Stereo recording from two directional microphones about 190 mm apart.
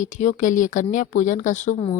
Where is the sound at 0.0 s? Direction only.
40° left (ahead or behind).